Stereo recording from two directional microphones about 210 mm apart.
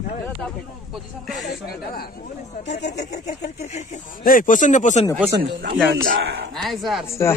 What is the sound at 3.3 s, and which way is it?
Speech, 35° left (ahead or behind).